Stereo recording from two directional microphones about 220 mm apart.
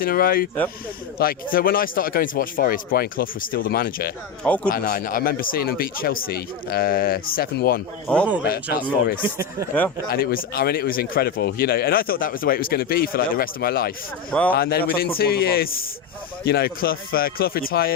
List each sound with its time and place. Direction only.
0.0 s speech: 40° left (ahead or behind)
4.4 s speech: 5° left (ahead or behind)
4.7 s speech: 40° left (ahead or behind)
8.0 s speech: 5° left (ahead or behind)
9.2 s speech: 10° right (ahead or behind)
10.1 s speech: 45° left (ahead or behind)
14.3 s speech: 5° left (ahead or behind)
14.5 s speech: 45° left (ahead or behind)